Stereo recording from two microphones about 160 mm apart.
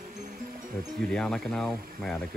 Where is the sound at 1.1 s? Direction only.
5° left (ahead or behind).